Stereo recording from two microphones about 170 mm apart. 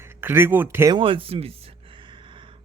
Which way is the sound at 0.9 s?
30° right (ahead or behind).